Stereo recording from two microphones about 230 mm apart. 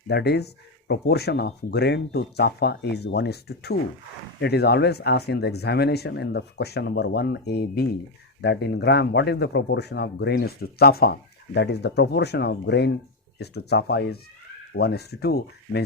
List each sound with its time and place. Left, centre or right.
0.1 s speech: left